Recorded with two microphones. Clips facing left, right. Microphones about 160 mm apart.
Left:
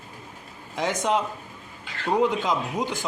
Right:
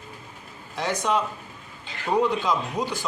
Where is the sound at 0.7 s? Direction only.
20° left (ahead or behind).